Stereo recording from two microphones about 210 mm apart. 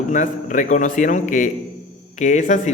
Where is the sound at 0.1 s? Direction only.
40° left (ahead or behind).